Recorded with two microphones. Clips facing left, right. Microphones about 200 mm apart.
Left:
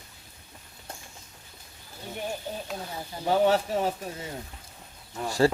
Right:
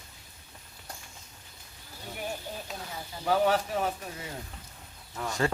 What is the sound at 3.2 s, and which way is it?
Speech, 25° left (ahead or behind).